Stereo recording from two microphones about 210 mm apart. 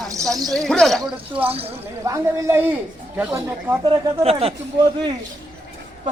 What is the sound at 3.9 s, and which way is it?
Speech, 30° right (ahead or behind).